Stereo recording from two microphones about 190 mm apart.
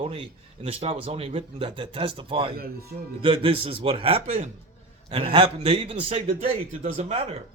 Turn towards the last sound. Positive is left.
turn(degrees=-35)  # may be behind; listen again after turning